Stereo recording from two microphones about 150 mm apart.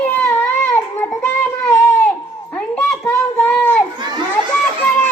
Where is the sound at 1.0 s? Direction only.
5° left (ahead or behind).